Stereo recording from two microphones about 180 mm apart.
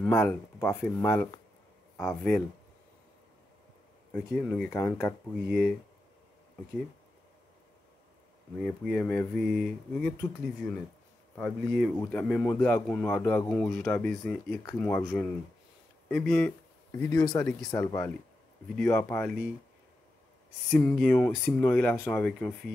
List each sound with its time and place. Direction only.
0.0 s speech: 10° left (ahead or behind)
4.1 s speech: 5° left (ahead or behind)
4.7 s speech: 15° left (ahead or behind)
5.3 s speech: 5° right (ahead or behind)
8.5 s speech: centre (ahead or behind)
16.1 s speech: centre (ahead or behind)
17.2 s speech: 25° left (ahead or behind)
17.5 s speech: centre (ahead or behind)
17.7 s speech: 15° left (ahead or behind)
20.7 s speech: 5° left (ahead or behind)